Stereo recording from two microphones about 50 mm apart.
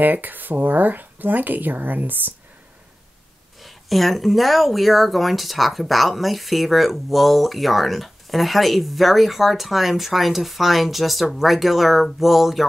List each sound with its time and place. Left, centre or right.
0.0 s speech: right
3.6 s speech: centre